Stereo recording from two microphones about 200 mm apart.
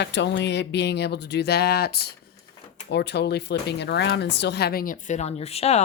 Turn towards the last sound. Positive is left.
turn(degrees=30)  # may be behind; listen again after turning